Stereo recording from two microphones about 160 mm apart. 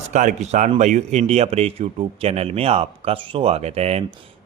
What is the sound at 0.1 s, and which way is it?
Speech, 50° right (ahead or behind).